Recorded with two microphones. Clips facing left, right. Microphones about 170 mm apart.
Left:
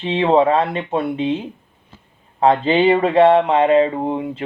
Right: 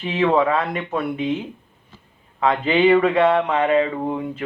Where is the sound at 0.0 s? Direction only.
25° left (ahead or behind).